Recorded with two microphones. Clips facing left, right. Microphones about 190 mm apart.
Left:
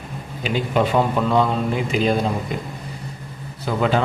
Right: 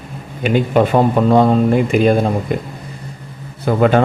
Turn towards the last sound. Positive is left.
turn(degrees=-55)  # may be behind; listen again after turning